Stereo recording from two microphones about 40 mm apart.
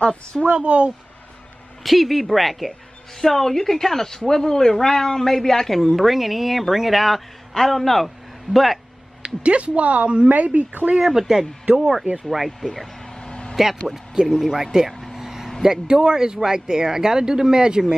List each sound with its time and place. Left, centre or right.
0.0 s a woman's voice: left
0.6 s speech: right
1.8 s speech: centre
5.8 s speech: centre
9.2 s speech: right
11.1 s speech: centre
13.1 s a sound: left
13.6 s speech: centre
15.1 s vehicle: centre
15.6 s speech: centre